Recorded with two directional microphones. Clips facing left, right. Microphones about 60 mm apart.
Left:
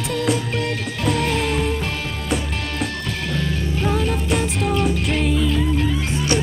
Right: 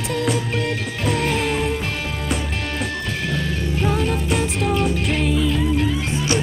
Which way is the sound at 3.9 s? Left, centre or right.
Centre.